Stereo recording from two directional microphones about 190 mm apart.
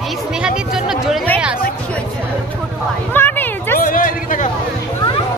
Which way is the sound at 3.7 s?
45° left (ahead or behind).